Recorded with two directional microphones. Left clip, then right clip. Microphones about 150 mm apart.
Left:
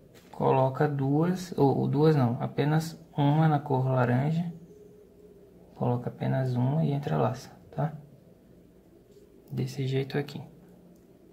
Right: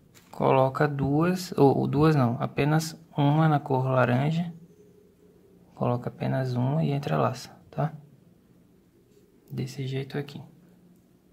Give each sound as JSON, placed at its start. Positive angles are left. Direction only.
{"t": 0.4, "sound": "speech", "side_deg": -30}
{"t": 5.8, "sound": "speech", "side_deg": -25}
{"t": 9.6, "sound": "speech", "side_deg": -5}